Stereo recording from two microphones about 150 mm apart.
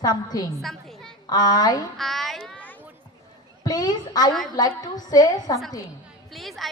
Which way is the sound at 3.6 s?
25° left (ahead or behind).